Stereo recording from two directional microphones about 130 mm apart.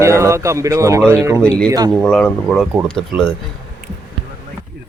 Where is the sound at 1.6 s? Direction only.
30° right (ahead or behind).